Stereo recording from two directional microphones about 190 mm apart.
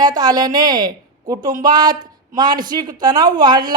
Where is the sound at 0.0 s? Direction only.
20° right (ahead or behind).